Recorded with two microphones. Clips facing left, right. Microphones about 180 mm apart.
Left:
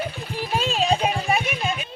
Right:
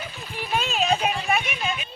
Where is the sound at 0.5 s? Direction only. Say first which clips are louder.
Left 1 dB; 35° left (ahead or behind).